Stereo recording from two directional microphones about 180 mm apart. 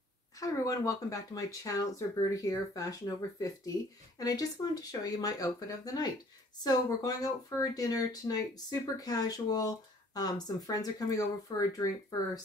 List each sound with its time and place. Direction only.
0.4 s speech: 20° left (ahead or behind)